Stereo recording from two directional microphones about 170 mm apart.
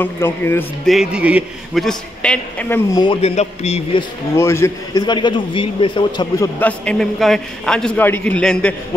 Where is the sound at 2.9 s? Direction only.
25° left (ahead or behind).